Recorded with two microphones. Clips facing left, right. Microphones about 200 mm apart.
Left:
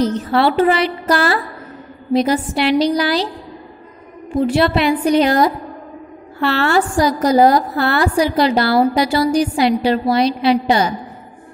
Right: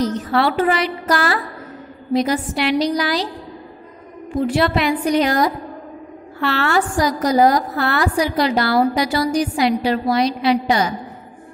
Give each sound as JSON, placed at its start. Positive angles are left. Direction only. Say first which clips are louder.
{"t": 0.0, "sound": "a woman's voice", "louder": "left 3 dB", "side_deg": 30}
{"t": 4.4, "sound": "a woman's voice", "louder": "left 3 dB", "side_deg": 30}